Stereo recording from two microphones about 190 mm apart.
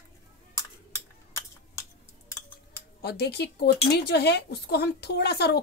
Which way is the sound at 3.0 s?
60° left (ahead or behind).